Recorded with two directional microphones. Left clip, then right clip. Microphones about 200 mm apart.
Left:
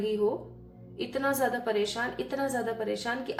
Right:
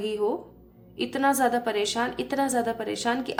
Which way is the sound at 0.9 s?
45° right (ahead or behind).